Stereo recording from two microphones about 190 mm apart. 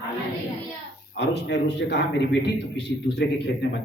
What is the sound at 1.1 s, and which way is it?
A man's voice, 65° left (ahead or behind).